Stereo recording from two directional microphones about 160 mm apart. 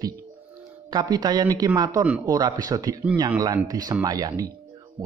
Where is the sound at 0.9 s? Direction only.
25° right (ahead or behind).